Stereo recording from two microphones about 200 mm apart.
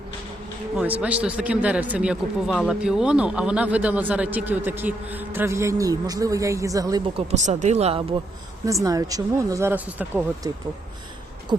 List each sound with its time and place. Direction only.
0.8 s a man's voice: 5° right (ahead or behind)
7.3 s speech: 35° right (ahead or behind)
8.6 s a man's voice: 15° right (ahead or behind)